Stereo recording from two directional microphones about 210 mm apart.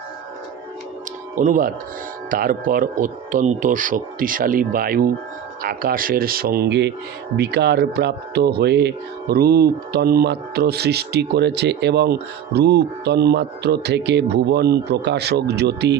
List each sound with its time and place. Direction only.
1.4 s speech: 40° right (ahead or behind)